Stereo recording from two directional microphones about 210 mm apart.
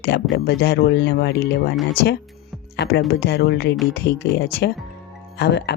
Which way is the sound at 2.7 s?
55° left (ahead or behind).